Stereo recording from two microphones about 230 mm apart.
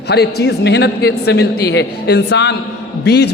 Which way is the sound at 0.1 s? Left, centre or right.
Left.